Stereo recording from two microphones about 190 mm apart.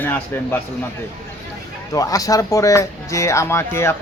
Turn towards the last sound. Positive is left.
turn(degrees=15)  # may be behind; listen again after turning